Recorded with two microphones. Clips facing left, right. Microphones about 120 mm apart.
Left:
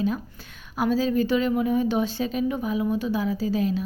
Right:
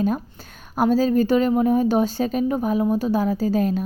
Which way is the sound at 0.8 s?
45° right (ahead or behind).